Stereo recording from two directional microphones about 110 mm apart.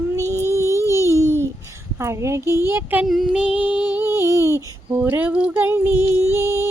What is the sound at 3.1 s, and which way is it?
Music, 5° right (ahead or behind).